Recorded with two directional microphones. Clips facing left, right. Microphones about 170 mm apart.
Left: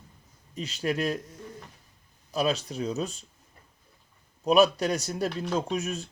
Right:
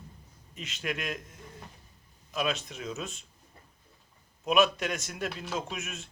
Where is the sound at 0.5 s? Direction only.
35° left (ahead or behind).